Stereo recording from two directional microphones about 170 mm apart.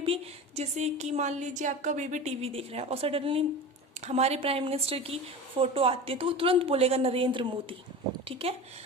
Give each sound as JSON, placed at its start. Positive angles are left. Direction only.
{"t": 0.0, "sound": "a woman's voice", "side_deg": -35}